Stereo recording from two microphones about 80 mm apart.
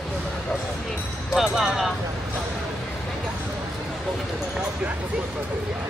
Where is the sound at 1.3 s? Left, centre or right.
Centre.